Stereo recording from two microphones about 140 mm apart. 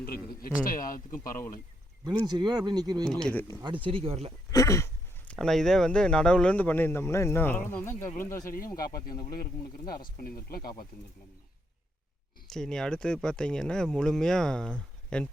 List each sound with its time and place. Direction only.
0.0 s a man's voice: 90° left
2.2 s speech: 30° right (ahead or behind)
3.1 s speech: 5° left (ahead or behind)
3.6 s speech: 35° right (ahead or behind)
4.5 s speech: 20° left (ahead or behind)
8.5 s speech: 90° left
12.5 s speech: 5° left (ahead or behind)